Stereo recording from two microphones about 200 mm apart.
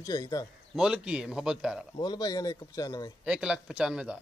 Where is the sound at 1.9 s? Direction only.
20° left (ahead or behind).